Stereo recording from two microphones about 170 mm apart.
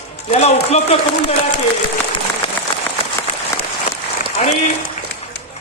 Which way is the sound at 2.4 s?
35° left (ahead or behind).